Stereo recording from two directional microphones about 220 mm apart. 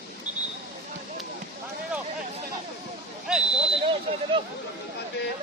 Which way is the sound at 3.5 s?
25° right (ahead or behind).